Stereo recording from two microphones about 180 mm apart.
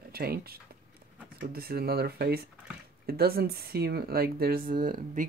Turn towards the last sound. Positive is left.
turn(degrees=-50)  # may be behind; listen again after turning